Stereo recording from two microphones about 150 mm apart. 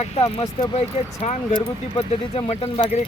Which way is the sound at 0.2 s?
35° left (ahead or behind).